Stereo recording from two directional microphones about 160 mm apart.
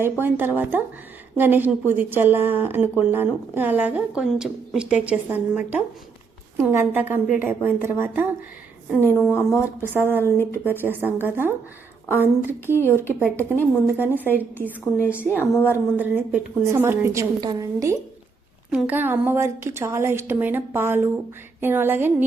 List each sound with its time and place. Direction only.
0.0 s a woman's voice: 15° right (ahead or behind)
9.0 s a woman's voice: 15° left (ahead or behind)
9.6 s a woman's voice: 10° right (ahead or behind)
10.2 s a woman's voice: 15° left (ahead or behind)
10.6 s a woman's voice: 10° right (ahead or behind)
12.6 s a woman's voice: 15° left (ahead or behind)
14.1 s a woman's voice: 10° left (ahead or behind)
15.7 s a woman's voice: 10° right (ahead or behind)
18.7 s a woman's voice: 10° right (ahead or behind)